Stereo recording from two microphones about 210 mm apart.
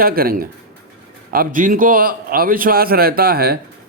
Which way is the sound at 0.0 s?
45° right (ahead or behind).